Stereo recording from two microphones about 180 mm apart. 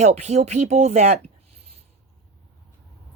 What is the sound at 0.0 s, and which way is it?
Speech, 40° right (ahead or behind).